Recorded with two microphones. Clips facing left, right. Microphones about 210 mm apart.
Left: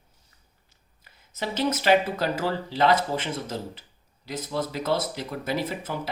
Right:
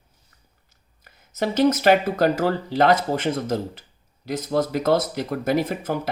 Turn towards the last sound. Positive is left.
turn(degrees=-45)  # may be behind; listen again after turning